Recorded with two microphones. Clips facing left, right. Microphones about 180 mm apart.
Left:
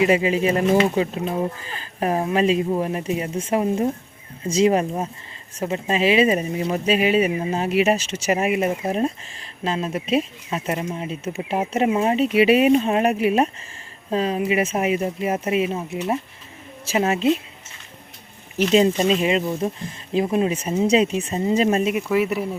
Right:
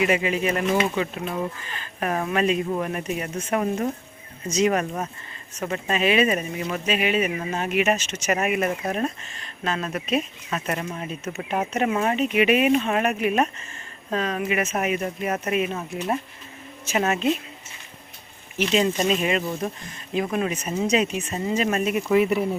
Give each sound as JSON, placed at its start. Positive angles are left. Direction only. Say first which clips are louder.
{"t": 0.0, "sound": "speech", "louder": "left 4 dB", "side_deg": 30}
{"t": 18.7, "sound": "speech", "louder": "left 5 dB", "side_deg": 30}
{"t": 20.1, "sound": "speech", "louder": "left 4 dB", "side_deg": 25}
{"t": 21.9, "sound": "speech", "louder": "right 1 dB", "side_deg": 5}